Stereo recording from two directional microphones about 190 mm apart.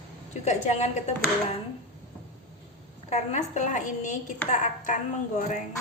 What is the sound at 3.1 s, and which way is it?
Speech, 35° left (ahead or behind).